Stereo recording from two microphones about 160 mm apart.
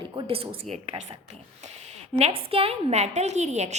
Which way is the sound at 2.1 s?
40° right (ahead or behind).